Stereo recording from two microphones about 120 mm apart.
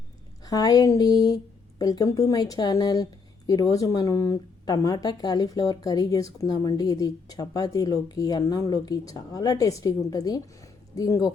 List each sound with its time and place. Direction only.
0.4 s speech: 30° left (ahead or behind)